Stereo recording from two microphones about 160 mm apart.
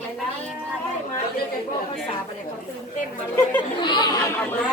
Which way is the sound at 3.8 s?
30° left (ahead or behind).